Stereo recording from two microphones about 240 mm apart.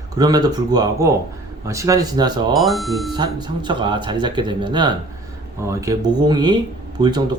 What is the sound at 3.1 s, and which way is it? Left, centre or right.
Speech, centre.